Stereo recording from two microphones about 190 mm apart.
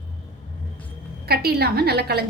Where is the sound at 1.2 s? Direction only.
55° right (ahead or behind).